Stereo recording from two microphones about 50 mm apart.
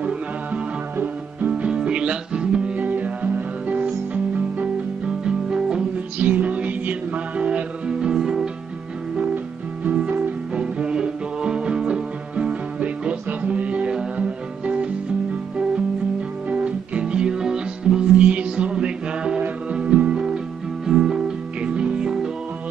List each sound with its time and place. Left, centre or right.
1.5 s music: centre
5.2 s music: centre
6.1 s music: right; by 8.5 s centre
9.9 s music: right
10.5 s music: centre
16.4 s music: right
20.8 s music: centre